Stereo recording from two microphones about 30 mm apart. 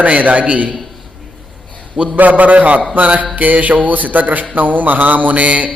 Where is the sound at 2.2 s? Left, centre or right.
Right.